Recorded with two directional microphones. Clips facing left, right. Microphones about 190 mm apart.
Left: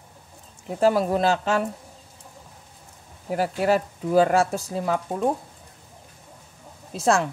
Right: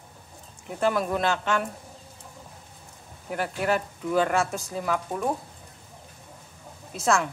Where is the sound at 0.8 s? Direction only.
35° left (ahead or behind).